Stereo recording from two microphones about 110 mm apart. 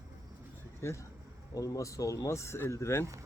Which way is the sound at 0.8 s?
25° left (ahead or behind).